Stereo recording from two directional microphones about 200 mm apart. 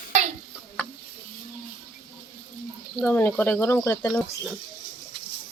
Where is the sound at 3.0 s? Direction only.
5° left (ahead or behind).